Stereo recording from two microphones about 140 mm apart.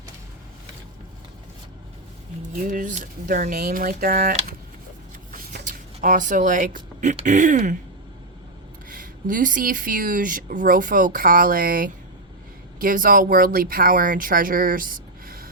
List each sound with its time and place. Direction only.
2.6 s speech: 70° right (ahead or behind)
5.3 s a sound: 75° right (ahead or behind)
7.3 s speech: 60° right (ahead or behind)
8.9 s speech: 75° right (ahead or behind)